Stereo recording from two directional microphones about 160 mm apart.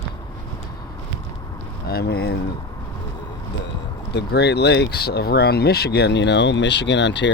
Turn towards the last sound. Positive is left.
turn(degrees=90)